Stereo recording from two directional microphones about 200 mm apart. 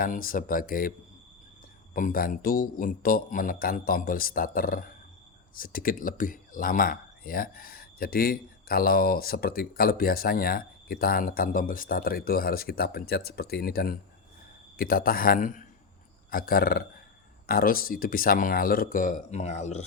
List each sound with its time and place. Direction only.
0.0 s speech: 45° left (ahead or behind)